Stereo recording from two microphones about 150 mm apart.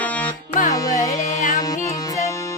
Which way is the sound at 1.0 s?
60° left (ahead or behind).